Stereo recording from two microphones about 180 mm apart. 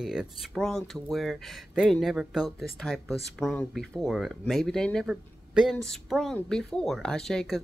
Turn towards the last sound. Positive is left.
turn(degrees=5)  # may be behind; listen again after turning